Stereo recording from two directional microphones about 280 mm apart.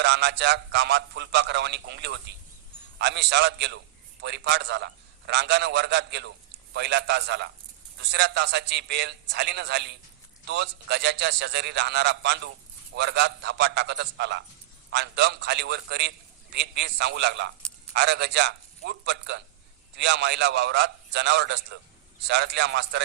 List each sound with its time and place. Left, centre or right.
0.0 s a man's voice: right